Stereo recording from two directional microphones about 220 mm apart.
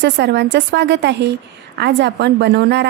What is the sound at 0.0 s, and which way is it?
A woman's voice, 50° right (ahead or behind).